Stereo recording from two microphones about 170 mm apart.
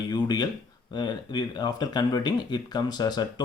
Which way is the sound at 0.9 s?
25° left (ahead or behind).